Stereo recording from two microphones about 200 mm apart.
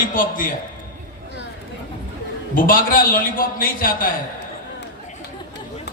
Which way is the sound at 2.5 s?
45° left (ahead or behind).